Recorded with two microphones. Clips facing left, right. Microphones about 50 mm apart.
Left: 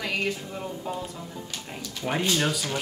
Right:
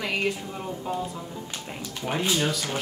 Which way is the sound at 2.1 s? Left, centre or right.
Centre.